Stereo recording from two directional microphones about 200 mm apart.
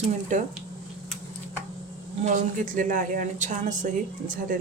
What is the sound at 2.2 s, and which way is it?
A woman's voice, 40° right (ahead or behind).